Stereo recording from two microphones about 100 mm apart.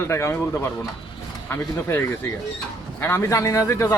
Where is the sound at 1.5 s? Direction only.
25° left (ahead or behind).